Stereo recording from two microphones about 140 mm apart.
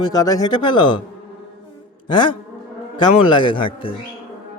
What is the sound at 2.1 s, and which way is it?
A man's voice, 35° left (ahead or behind).